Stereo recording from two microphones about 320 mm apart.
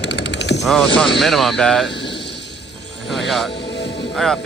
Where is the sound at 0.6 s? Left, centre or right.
Centre.